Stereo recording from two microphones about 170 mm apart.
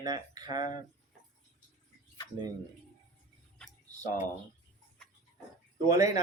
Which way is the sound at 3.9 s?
20° right (ahead or behind).